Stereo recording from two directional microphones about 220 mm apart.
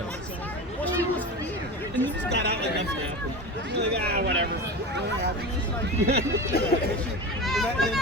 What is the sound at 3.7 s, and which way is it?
Speech, 50° right (ahead or behind).